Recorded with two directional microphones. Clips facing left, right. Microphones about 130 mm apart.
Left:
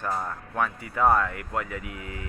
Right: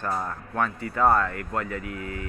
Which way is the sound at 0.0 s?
Centre (ahead or behind).